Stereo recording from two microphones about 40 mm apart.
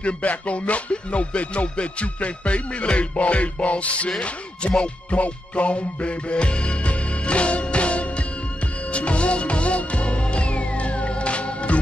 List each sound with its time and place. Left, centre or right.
0.0 s music: left